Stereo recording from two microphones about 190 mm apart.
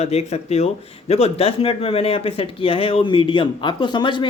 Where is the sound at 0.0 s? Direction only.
35° left (ahead or behind).